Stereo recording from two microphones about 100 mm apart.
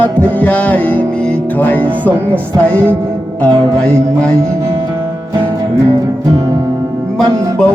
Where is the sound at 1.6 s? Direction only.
15° left (ahead or behind).